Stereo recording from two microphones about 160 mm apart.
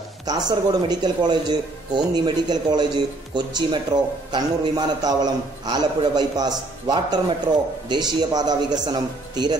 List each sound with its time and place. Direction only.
0.5 s speech: 25° right (ahead or behind)